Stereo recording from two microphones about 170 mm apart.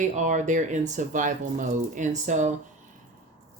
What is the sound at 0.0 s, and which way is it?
Speech, 45° right (ahead or behind).